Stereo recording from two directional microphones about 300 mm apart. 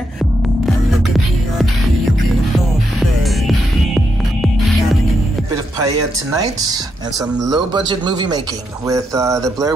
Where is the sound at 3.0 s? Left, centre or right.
Centre.